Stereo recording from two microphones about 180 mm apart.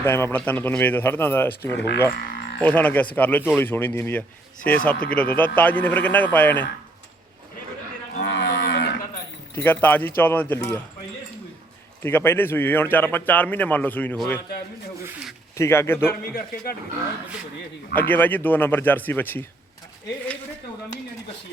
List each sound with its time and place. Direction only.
0.0 s a man's voice: 15° left (ahead or behind)
8.2 s cattle: 80° left
9.6 s a man's voice: 10° left (ahead or behind)
12.0 s a man's voice: 10° left (ahead or behind)
15.0 s speech: 5° right (ahead or behind)
15.5 s a man's voice: 15° left (ahead or behind)
17.9 s a man's voice: 10° left (ahead or behind)